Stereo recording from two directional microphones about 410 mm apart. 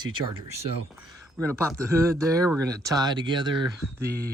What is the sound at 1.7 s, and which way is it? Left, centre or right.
Speech, centre.